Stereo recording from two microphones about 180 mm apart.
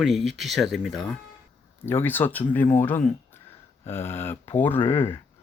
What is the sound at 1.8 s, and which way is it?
Speech, 10° left (ahead or behind).